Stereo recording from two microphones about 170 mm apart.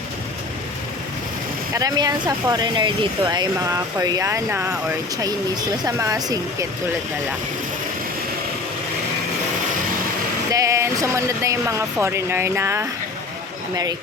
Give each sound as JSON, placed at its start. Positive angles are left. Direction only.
{"t": 1.7, "sound": "speech", "side_deg": -20}
{"t": 10.5, "sound": "speech", "side_deg": -20}